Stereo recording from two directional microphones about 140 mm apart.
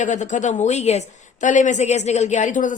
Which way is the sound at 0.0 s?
60° left (ahead or behind).